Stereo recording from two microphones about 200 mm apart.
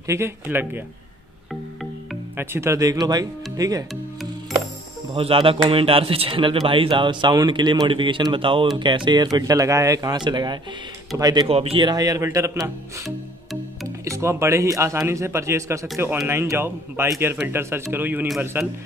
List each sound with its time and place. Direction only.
0.0 s speech: 15° right (ahead or behind)
2.3 s speech: 15° right (ahead or behind)
3.9 s music: centre (ahead or behind)
5.1 s speech: 25° right (ahead or behind)
13.8 s speech: 15° right (ahead or behind)